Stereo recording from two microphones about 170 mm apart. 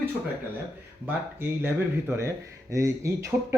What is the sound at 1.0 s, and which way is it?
Speech, 10° right (ahead or behind).